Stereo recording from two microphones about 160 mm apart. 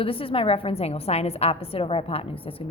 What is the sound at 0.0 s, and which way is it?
A woman's voice, 35° left (ahead or behind).